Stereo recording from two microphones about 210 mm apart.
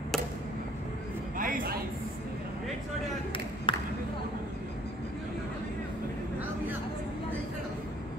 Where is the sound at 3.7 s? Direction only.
25° left (ahead or behind).